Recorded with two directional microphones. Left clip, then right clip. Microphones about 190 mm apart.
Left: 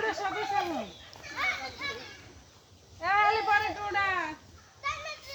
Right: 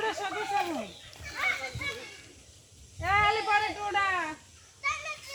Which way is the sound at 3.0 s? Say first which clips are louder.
Even; 50° right (ahead or behind).